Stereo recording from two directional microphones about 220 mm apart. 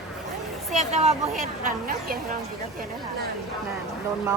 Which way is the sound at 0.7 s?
30° right (ahead or behind).